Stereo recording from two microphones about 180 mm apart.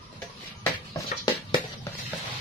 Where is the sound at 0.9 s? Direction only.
20° left (ahead or behind).